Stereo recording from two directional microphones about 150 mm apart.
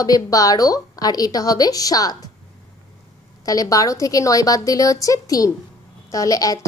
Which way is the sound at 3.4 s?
25° left (ahead or behind).